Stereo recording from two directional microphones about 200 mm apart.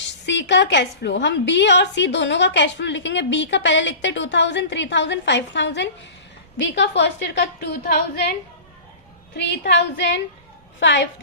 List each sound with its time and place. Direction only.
0.0 s a woman's voice: 60° left (ahead or behind)
9.3 s a woman's voice: 60° left (ahead or behind)